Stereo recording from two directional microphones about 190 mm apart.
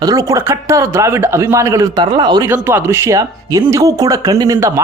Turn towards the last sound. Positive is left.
turn(degrees=-15)  # may be behind; listen again after turning